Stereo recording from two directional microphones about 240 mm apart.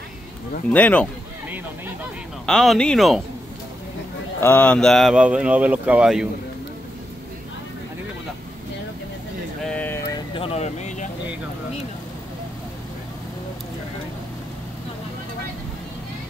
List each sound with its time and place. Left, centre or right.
0.7 s speech: centre
2.4 s speech: centre
4.4 s speech: centre
9.6 s a sound: centre
10.1 s vehicle: left